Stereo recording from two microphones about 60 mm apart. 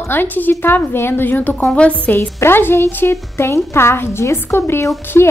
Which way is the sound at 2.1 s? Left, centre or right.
Left.